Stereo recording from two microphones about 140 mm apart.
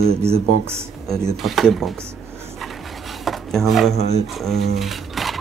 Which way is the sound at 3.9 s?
45° right (ahead or behind).